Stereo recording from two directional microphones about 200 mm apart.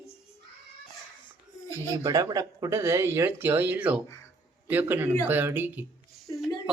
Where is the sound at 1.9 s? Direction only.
15° right (ahead or behind).